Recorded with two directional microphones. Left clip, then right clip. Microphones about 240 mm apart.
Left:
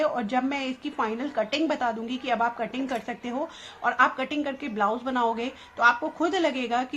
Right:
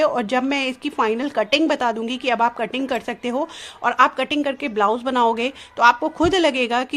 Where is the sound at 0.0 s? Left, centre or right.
Right.